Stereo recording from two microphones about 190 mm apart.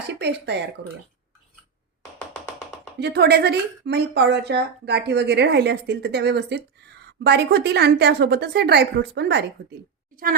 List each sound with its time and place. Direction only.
0.1 s speech: 60° right (ahead or behind)
3.0 s a woman's voice: 60° right (ahead or behind)